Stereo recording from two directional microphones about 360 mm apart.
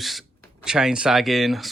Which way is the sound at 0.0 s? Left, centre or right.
Centre.